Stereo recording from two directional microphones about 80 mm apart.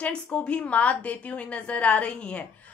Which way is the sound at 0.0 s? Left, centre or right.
Centre.